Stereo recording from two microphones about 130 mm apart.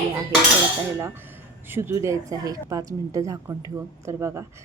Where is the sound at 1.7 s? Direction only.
20° right (ahead or behind).